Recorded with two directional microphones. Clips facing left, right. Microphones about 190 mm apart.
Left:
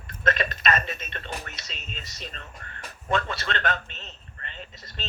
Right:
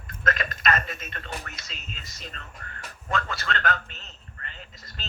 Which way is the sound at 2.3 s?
25° left (ahead or behind).